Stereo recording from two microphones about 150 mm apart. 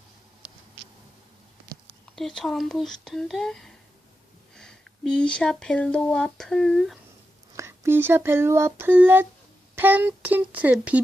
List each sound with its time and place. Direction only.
2.1 s speech: centre (ahead or behind)
7.5 s speech: 15° right (ahead or behind)